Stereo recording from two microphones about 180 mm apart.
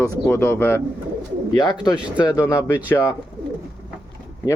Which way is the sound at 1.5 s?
20° left (ahead or behind).